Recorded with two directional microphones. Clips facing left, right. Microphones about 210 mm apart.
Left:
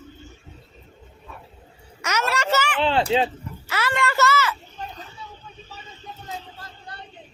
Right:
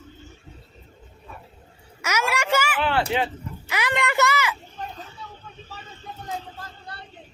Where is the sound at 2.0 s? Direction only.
10° right (ahead or behind).